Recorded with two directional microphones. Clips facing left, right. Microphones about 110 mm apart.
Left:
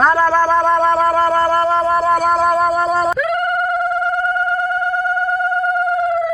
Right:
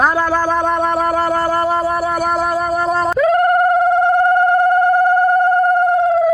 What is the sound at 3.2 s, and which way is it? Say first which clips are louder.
Telephone: right 6 dB; 35° right (ahead or behind).